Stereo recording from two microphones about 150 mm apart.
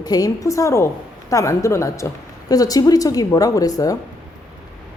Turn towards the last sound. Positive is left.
turn(degrees=25)  # may be behind; listen again after turning